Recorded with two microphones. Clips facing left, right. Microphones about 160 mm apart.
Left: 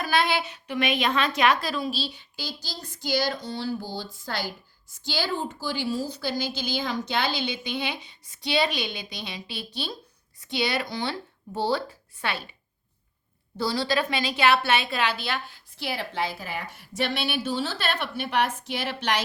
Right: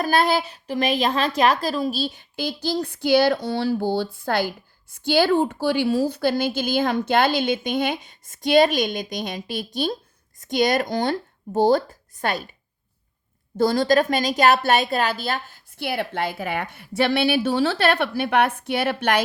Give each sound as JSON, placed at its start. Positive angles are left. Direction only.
{"t": 0.0, "sound": "a woman's voice", "side_deg": -40}
{"t": 13.6, "sound": "a woman's voice", "side_deg": -50}